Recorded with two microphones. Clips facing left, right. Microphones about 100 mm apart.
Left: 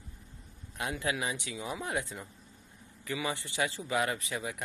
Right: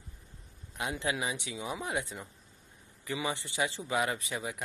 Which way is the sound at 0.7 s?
20° right (ahead or behind).